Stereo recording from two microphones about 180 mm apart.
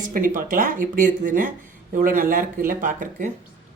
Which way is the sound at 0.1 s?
50° right (ahead or behind).